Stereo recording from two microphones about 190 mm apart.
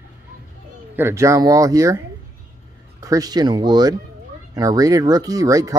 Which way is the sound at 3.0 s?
20° right (ahead or behind).